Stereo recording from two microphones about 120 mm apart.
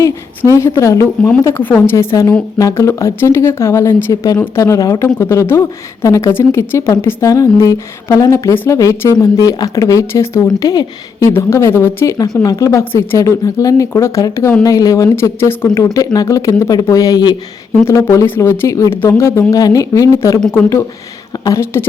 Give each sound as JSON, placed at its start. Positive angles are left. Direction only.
{"t": 0.0, "sound": "a woman's voice", "side_deg": 25}
{"t": 12.8, "sound": "speech", "side_deg": 20}
{"t": 17.8, "sound": "speech", "side_deg": 20}